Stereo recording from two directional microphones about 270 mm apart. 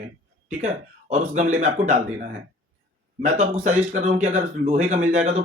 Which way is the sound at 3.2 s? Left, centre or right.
Right.